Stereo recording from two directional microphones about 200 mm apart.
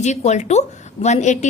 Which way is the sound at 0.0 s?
35° left (ahead or behind).